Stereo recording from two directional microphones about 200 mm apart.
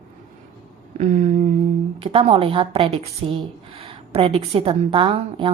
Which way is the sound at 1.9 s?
25° right (ahead or behind).